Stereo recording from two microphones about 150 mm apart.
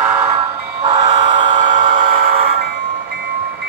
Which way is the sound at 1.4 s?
60° right (ahead or behind).